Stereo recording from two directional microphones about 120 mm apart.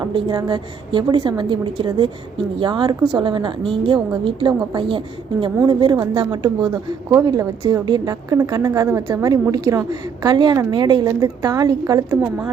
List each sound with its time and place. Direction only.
0.0 s a woman's voice: 40° right (ahead or behind)